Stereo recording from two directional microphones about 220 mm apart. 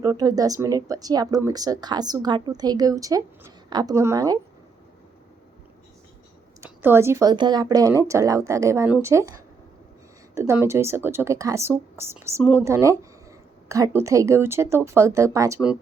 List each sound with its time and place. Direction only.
0.0 s speech: 15° right (ahead or behind)
6.6 s speech: 10° right (ahead or behind)
10.3 s speech: 10° right (ahead or behind)